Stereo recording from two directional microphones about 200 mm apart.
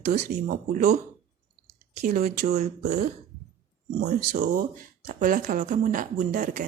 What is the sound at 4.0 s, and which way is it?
Speech, 35° right (ahead or behind).